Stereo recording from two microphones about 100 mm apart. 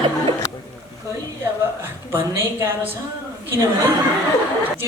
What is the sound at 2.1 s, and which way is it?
Speech, 25° right (ahead or behind).